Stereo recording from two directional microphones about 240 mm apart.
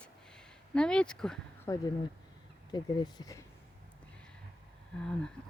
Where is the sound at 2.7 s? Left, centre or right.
Centre.